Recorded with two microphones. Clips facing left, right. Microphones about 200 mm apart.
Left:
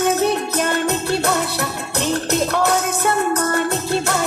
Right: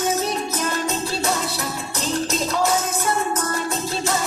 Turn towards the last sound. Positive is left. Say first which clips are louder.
# left 4 dB
turn(degrees=65)  # may be behind; listen again after turning